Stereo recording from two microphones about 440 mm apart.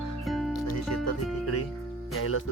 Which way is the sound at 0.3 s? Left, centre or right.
Centre.